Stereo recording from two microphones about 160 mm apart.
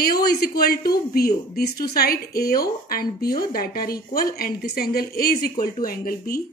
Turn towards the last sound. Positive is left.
turn(degrees=65)  # may be behind; listen again after turning